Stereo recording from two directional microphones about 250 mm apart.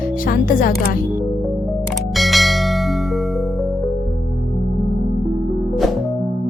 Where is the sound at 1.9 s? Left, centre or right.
Centre.